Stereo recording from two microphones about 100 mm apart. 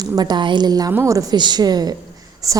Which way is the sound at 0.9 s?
30° right (ahead or behind).